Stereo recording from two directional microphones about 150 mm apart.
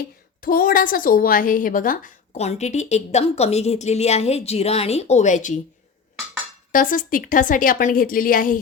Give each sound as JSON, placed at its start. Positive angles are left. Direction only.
{"t": 0.4, "sound": "a woman's voice", "side_deg": 70}
{"t": 2.4, "sound": "a woman's voice", "side_deg": 45}
{"t": 6.7, "sound": "speech", "side_deg": 65}